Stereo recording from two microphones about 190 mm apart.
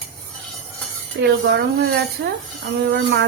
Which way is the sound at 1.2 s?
65° right (ahead or behind).